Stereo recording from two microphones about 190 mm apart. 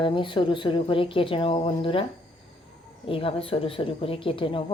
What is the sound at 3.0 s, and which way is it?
Speech, 30° left (ahead or behind).